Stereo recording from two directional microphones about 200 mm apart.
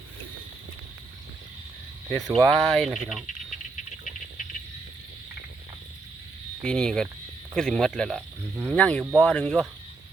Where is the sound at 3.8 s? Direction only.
40° left (ahead or behind).